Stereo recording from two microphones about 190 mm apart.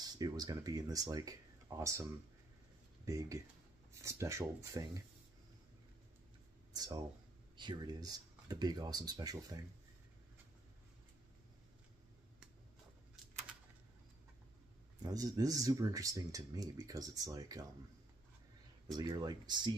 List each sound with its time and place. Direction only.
0.0 s speech: 20° right (ahead or behind)
3.1 s speech: 15° right (ahead or behind)
6.7 s a sound: 20° right (ahead or behind)
7.5 s speech: 25° right (ahead or behind)
15.0 s speech: 20° right (ahead or behind)
18.9 s speech: 20° right (ahead or behind)